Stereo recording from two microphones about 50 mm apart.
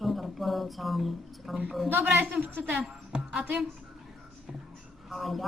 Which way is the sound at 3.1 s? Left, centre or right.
Centre.